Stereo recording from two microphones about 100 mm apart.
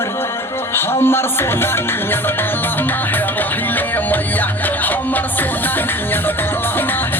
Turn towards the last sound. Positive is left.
turn(degrees=20)  # may be behind; listen again after turning